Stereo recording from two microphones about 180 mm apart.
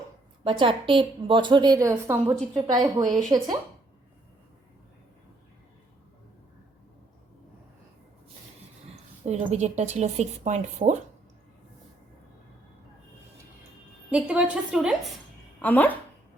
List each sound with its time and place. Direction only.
0.4 s a woman's voice: 30° right (ahead or behind)
3.0 s a woman's voice: centre (ahead or behind)
3.3 s a woman's voice: 20° right (ahead or behind)
8.9 s a woman's voice: 40° right (ahead or behind)
14.1 s a woman's voice: 5° right (ahead or behind)
15.6 s speech: 10° left (ahead or behind)